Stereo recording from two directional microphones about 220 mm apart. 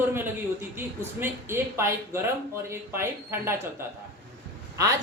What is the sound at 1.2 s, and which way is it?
Speech, 10° right (ahead or behind).